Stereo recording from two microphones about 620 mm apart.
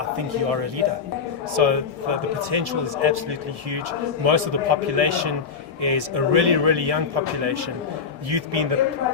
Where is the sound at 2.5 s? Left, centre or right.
Right.